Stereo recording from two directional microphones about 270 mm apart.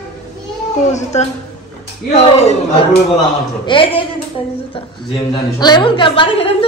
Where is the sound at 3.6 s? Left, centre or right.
Centre.